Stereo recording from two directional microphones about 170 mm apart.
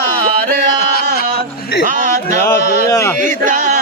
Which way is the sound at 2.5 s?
15° left (ahead or behind).